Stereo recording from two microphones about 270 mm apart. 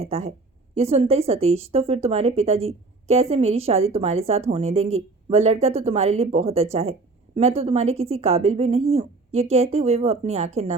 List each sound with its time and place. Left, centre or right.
0.0 s a woman's voice: right